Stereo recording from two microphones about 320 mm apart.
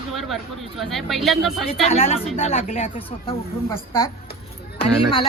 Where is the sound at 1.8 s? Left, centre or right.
Centre.